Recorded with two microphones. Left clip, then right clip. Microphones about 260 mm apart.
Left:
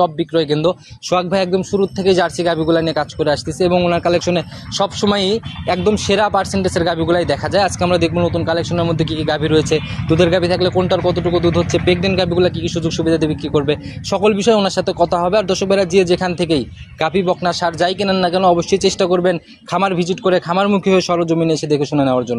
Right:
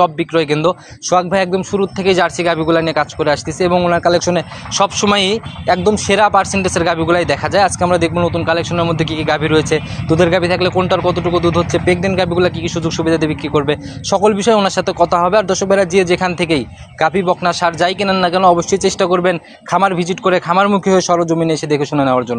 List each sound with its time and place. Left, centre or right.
0.0 s speech: centre